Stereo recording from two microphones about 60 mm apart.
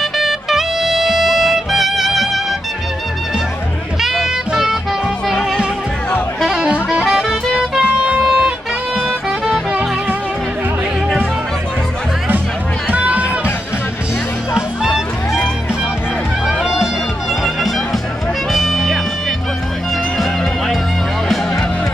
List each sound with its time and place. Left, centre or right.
0.0 s music: centre
4.0 s music: centre
5.3 s music: centre
6.7 s music: centre
12.9 s run: right
14.5 s music: centre
16.4 s music: centre
18.5 s music: centre